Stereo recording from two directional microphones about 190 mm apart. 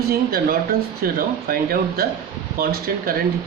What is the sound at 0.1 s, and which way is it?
Speech, 50° right (ahead or behind).